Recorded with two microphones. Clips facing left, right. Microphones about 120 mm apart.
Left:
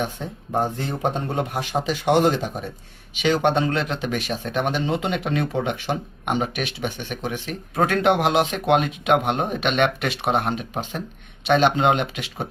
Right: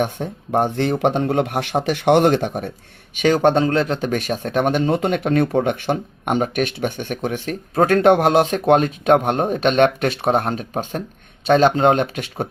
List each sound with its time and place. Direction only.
0.0 s speech: 60° right (ahead or behind)
3.2 s speech: 45° right (ahead or behind)